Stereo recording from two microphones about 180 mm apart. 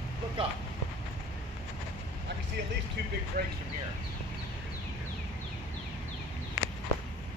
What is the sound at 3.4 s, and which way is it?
Speech, 55° right (ahead or behind).